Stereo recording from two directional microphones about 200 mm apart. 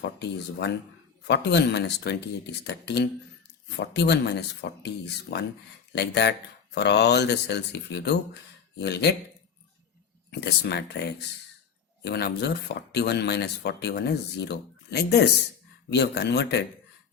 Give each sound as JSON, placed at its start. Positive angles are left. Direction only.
{"t": 0.2, "sound": "speech", "side_deg": 55}
{"t": 10.4, "sound": "speech", "side_deg": 55}